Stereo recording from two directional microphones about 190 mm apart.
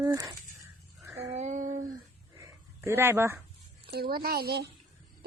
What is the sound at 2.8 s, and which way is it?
Speech, 10° right (ahead or behind).